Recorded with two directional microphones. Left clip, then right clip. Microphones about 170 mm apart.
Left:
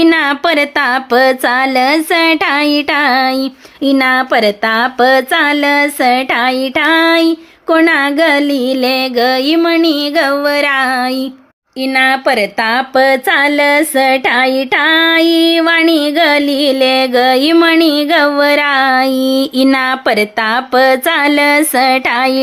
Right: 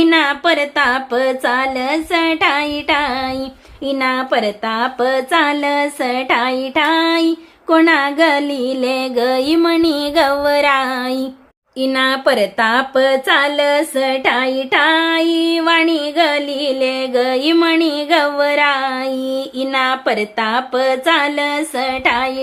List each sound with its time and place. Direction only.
0.0 s speech: 40° left (ahead or behind)